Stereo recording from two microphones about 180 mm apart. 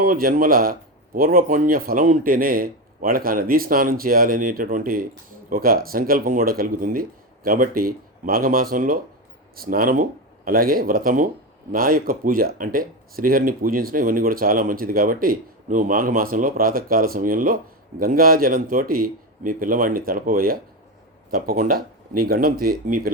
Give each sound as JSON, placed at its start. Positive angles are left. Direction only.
{"t": 0.0, "sound": "speech", "side_deg": -55}